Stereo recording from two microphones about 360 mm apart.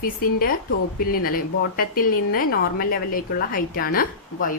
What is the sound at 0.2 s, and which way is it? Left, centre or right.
A woman's voice, left.